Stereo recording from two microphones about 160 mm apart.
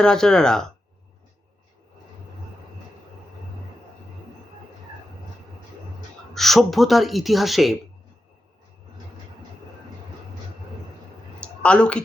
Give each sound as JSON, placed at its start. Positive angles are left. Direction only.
{"t": 0.0, "sound": "speech", "side_deg": 5}
{"t": 6.3, "sound": "speech", "side_deg": 0}
{"t": 11.3, "sound": "a sound", "side_deg": 5}